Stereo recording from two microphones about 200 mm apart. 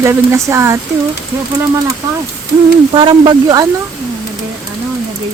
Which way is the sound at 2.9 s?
25° right (ahead or behind).